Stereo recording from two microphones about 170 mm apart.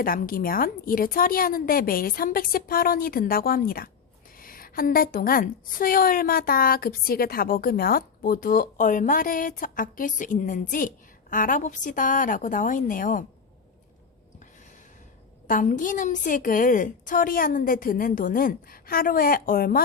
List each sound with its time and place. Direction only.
0.0 s a woman's voice: 55° left (ahead or behind)
15.4 s a woman's voice: 50° left (ahead or behind)